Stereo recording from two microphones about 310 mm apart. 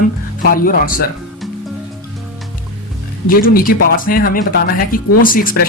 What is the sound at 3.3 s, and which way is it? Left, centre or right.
Speech, left.